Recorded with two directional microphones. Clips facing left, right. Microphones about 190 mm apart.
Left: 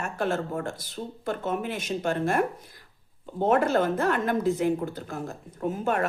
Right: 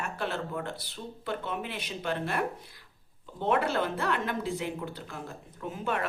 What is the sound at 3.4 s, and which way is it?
Speech, 45° left (ahead or behind).